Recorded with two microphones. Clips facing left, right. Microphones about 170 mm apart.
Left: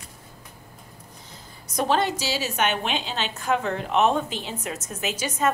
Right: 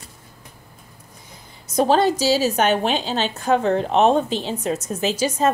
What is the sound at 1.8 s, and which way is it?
A woman's voice, 35° right (ahead or behind).